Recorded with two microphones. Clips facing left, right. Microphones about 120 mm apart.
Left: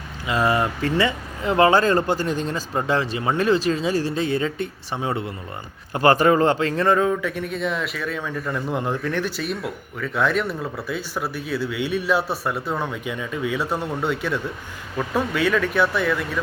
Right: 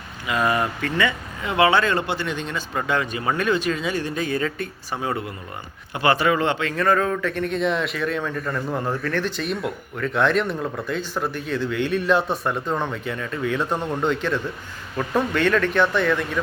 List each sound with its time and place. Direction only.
0.3 s speech: 30° left (ahead or behind)
5.9 s speech: 40° left (ahead or behind); by 16.4 s 5° left (ahead or behind)